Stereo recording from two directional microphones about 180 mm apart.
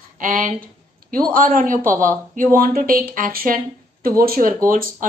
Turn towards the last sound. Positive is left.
turn(degrees=-50)  # may be behind; listen again after turning